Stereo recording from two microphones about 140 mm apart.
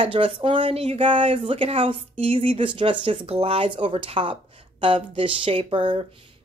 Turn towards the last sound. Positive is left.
turn(degrees=-40)  # may be behind; listen again after turning